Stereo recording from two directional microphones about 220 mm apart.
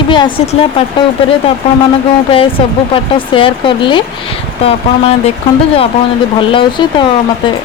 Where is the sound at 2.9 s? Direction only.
25° left (ahead or behind).